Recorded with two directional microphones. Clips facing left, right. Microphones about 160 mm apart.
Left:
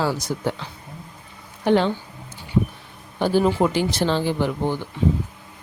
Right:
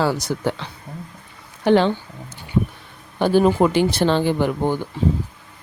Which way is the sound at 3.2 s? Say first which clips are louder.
Right 3 dB; 60° right (ahead or behind).